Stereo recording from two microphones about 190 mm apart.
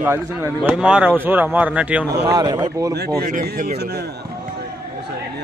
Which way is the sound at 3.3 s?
50° right (ahead or behind).